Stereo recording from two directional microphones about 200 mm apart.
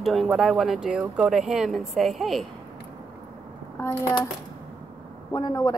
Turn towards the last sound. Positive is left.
turn(degrees=20)  # may be behind; listen again after turning